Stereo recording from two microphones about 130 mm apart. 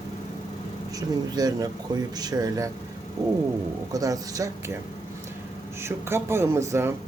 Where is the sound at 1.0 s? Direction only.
30° right (ahead or behind).